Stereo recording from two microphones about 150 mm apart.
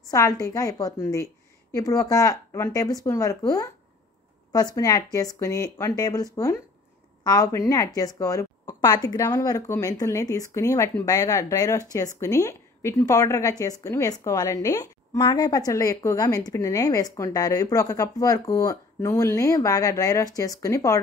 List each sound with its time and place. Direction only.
0.1 s a woman's voice: 25° left (ahead or behind)